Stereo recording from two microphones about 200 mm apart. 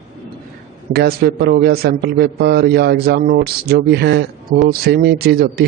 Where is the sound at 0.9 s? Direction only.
55° right (ahead or behind).